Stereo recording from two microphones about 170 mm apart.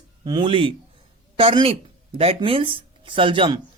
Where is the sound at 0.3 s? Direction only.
30° right (ahead or behind).